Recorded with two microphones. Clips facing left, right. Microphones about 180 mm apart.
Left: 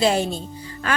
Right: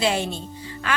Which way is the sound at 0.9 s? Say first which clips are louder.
Left 2 dB; 40° left (ahead or behind).